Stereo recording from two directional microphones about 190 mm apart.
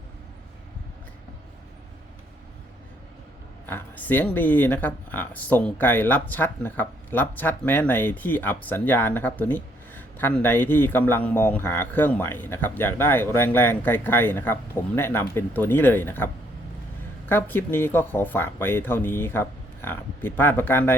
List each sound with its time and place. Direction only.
3.7 s speech: 10° left (ahead or behind)